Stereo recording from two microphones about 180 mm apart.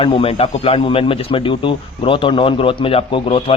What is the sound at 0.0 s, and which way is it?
Speech, 30° left (ahead or behind).